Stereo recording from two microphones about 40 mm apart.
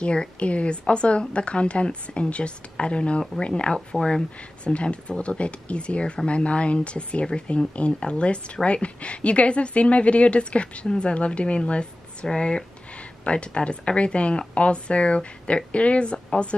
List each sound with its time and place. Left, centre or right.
0.0 s a woman's voice: left
3.9 s speech: centre
4.6 s a woman's voice: left